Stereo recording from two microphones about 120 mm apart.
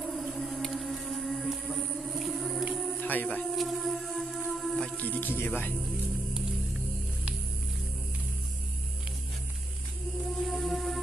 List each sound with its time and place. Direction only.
0.0 s a sound: centre (ahead or behind)
3.0 s a sound: 15° left (ahead or behind)
3.4 s music: centre (ahead or behind)
4.9 s music: 15° left (ahead or behind)
5.8 s music: 5° right (ahead or behind)
10.1 s music: centre (ahead or behind)